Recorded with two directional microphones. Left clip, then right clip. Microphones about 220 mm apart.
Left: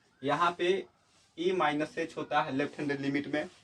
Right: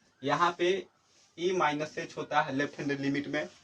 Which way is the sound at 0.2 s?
15° left (ahead or behind).